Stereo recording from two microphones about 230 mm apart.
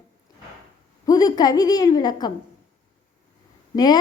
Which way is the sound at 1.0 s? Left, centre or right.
Centre.